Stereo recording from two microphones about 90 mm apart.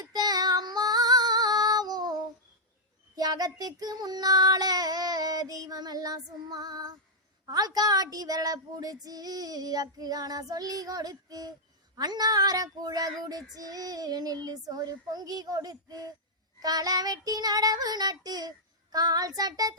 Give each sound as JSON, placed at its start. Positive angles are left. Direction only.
{"t": 0.0, "sound": "female singing", "side_deg": -50}
{"t": 3.2, "sound": "child singing", "side_deg": -45}